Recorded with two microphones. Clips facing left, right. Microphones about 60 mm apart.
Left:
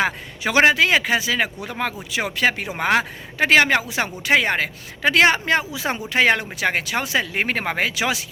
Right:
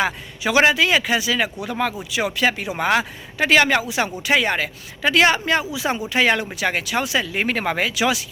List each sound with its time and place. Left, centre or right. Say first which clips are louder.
0.0 s speech: even; left